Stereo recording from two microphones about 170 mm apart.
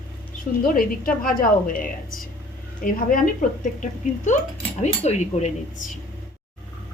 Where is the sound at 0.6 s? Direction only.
55° left (ahead or behind); by 5.9 s 40° left (ahead or behind).